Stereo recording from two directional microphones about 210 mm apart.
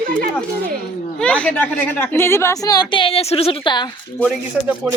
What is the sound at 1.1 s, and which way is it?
Speech, 5° left (ahead or behind).